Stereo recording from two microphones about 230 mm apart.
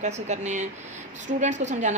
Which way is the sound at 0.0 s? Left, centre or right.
Right.